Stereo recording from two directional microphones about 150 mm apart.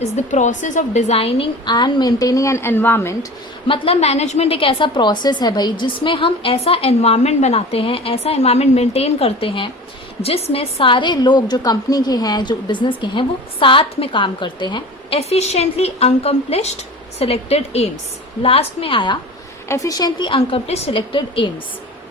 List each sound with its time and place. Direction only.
0.0 s a woman's voice: 50° left (ahead or behind); by 3.2 s 15° left (ahead or behind)
3.7 s a woman's voice: 40° left (ahead or behind)
15.2 s a woman's voice: 45° left (ahead or behind)
19.6 s a woman's voice: 20° left (ahead or behind)